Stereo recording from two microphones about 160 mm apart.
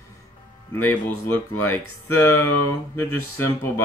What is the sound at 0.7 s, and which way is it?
Speech, 15° left (ahead or behind).